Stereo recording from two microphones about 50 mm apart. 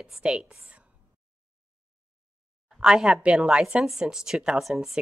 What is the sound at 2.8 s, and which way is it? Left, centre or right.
Speech, centre.